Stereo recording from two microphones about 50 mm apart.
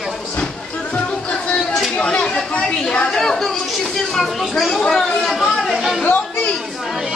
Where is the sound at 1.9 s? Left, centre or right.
Centre.